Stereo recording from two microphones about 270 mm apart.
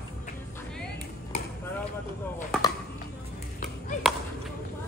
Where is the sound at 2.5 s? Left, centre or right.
Centre.